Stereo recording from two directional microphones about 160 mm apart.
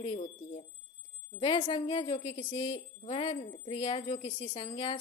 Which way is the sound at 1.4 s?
30° left (ahead or behind).